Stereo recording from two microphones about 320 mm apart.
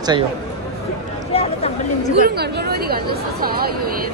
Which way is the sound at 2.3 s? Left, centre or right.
Right.